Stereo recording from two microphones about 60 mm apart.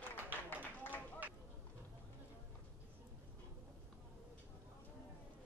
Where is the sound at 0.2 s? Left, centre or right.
Right.